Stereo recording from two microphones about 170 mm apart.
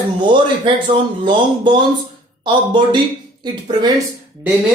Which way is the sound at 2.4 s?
30° right (ahead or behind).